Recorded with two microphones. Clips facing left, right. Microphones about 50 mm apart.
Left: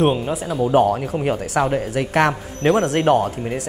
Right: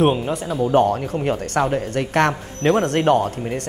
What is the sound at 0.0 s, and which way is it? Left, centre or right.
Speech, centre.